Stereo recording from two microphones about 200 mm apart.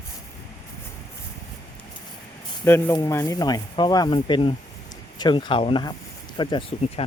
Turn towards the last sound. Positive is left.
turn(degrees=30)  # may be behind; listen again after turning